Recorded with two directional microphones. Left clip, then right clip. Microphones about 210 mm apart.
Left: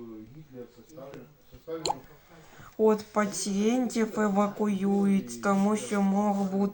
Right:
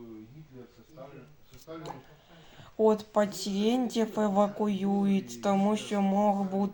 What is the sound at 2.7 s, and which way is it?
Speech, centre (ahead or behind).